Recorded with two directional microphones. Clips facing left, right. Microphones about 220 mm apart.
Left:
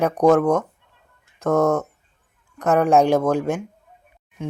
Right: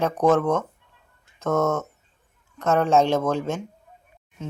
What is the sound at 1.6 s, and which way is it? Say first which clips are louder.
Speech: left 4 dB; 15° left (ahead or behind).